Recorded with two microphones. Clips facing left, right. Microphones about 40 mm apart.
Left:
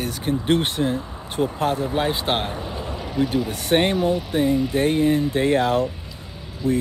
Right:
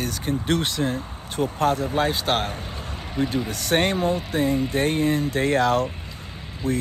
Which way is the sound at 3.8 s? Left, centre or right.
Centre.